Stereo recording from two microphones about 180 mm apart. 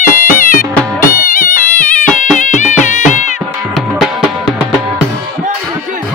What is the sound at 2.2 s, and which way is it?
Music, 45° left (ahead or behind).